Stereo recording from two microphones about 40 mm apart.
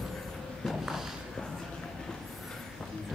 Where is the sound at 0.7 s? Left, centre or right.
Centre.